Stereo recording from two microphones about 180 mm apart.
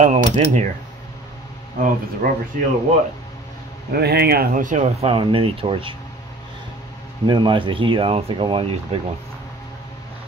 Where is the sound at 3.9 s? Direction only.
65° right (ahead or behind); by 5.9 s 30° right (ahead or behind).